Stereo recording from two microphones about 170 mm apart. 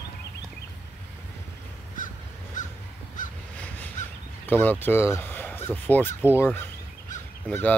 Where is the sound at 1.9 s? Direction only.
50° left (ahead or behind).